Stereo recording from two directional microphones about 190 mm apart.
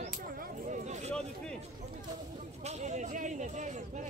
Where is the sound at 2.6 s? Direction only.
35° right (ahead or behind).